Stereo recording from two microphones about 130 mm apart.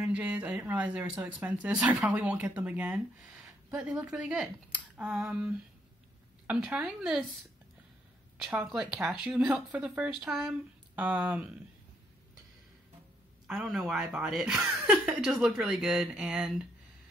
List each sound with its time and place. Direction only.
0.0 s speech: 10° right (ahead or behind)
8.4 s speech: 5° right (ahead or behind)
13.5 s speech: centre (ahead or behind)